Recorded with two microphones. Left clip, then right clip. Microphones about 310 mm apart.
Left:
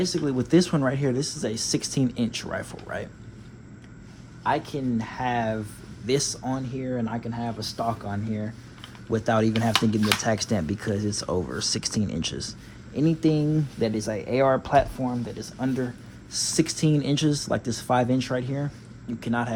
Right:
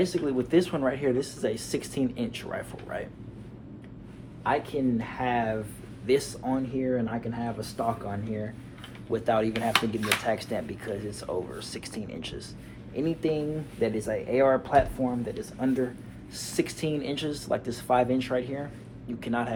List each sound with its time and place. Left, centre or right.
0.0 s speech: left
4.4 s speech: left